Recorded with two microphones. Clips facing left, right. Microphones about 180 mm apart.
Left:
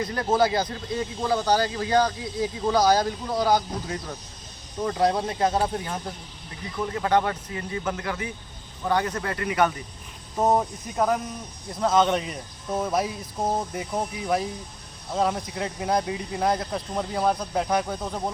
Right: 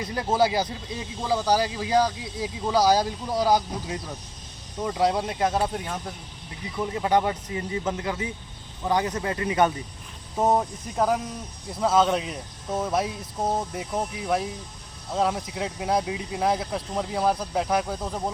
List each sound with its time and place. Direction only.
0.0 s speech: 10° right (ahead or behind)
6.8 s speech: 15° right (ahead or behind)
10.3 s speech: 5° right (ahead or behind)